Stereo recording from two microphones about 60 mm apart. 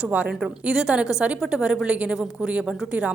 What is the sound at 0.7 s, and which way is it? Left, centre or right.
A woman's voice, centre.